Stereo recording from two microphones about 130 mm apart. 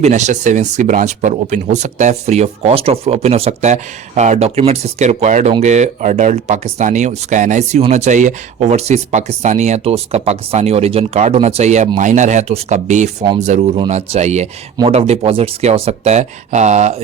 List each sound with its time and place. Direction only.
0.0 s speech: 65° right (ahead or behind)
7.8 s speech: 60° right (ahead or behind)
11.9 s speech: 70° right (ahead or behind)